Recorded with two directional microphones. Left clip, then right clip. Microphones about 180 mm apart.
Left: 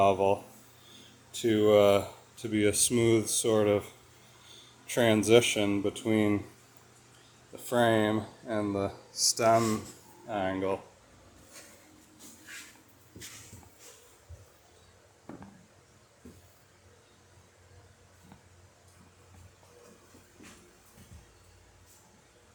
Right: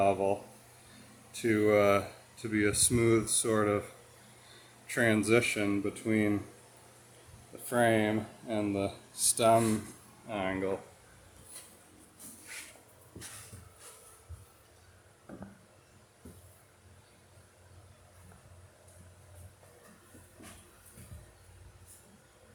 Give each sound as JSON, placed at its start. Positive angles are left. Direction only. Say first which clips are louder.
{"t": 0.0, "sound": "speech", "louder": "left 4 dB", "side_deg": 15}
{"t": 4.9, "sound": "speech", "louder": "left 4 dB", "side_deg": 15}
{"t": 7.7, "sound": "speech", "louder": "left 2 dB", "side_deg": 10}
{"t": 9.1, "sound": "speech", "louder": "left 9 dB", "side_deg": -20}
{"t": 9.4, "sound": "speech", "louder": "even", "side_deg": 0}